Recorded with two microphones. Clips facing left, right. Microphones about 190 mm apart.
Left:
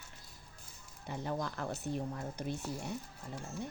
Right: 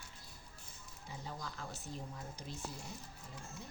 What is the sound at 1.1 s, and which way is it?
Speech, 65° left (ahead or behind).